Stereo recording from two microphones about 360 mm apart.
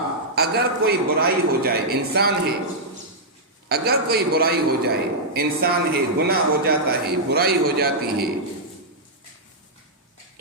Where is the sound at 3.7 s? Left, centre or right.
Right.